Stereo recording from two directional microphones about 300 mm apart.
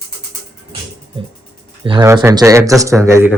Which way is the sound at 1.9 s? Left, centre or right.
Centre.